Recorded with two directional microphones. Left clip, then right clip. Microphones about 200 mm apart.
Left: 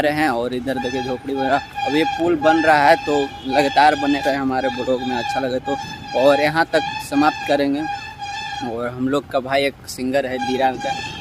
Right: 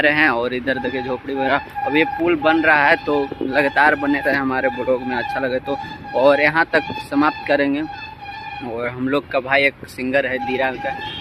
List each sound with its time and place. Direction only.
0.0 s speech: 10° left (ahead or behind)
5.6 s speech: 10° right (ahead or behind)
6.2 s speech: 10° left (ahead or behind)